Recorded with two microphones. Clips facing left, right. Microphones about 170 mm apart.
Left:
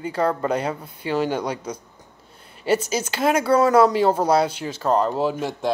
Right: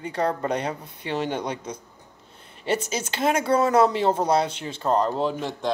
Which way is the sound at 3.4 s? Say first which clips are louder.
Left 4 dB; 25° right (ahead or behind).